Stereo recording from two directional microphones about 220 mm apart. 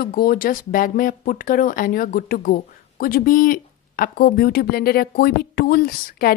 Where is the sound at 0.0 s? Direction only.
40° left (ahead or behind).